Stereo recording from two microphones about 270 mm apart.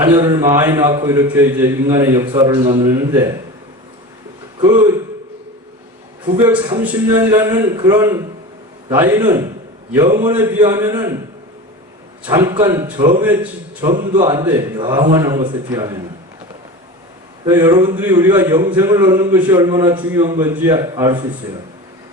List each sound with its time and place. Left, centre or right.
0.0 s a man's voice: centre
6.2 s a man's voice: centre
12.2 s a man's voice: centre
17.4 s a man's voice: centre